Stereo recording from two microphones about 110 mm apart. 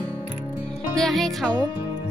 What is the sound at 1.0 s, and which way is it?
Speech, centre (ahead or behind).